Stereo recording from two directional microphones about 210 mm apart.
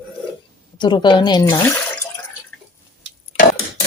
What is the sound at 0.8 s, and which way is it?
Speech, 20° left (ahead or behind).